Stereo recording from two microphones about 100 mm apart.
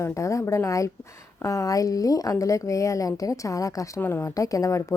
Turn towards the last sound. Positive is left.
turn(degrees=30)  # may be behind; listen again after turning